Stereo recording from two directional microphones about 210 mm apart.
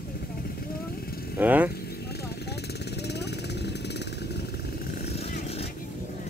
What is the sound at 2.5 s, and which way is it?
Vehicle, 50° left (ahead or behind).